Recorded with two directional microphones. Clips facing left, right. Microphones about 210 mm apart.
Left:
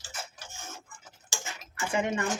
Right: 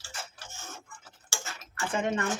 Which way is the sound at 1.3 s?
15° left (ahead or behind).